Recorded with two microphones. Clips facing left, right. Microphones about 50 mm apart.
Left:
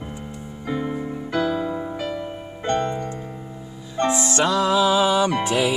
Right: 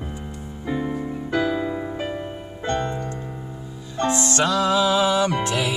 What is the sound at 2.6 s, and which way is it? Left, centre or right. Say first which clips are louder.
Music: left 2 dB; left.